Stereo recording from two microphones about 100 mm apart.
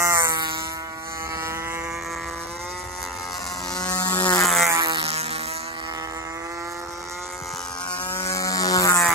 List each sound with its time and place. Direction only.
0.0 s music: 30° right (ahead or behind)
3.9 s a sound: 40° left (ahead or behind)
4.4 s insect: centre (ahead or behind)
4.7 s a sound: 45° right (ahead or behind)
5.0 s vehicle: 85° right
8.3 s insect: 35° left (ahead or behind)